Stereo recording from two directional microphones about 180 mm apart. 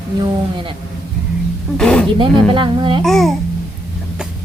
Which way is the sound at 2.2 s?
25° right (ahead or behind).